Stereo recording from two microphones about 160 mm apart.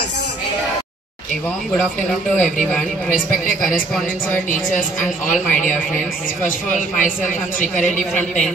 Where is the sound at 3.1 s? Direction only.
60° left (ahead or behind).